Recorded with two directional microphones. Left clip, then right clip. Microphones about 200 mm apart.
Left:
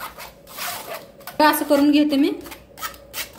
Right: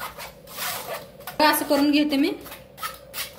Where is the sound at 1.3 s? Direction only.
45° left (ahead or behind).